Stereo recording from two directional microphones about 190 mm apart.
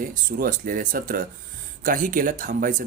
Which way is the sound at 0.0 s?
45° right (ahead or behind).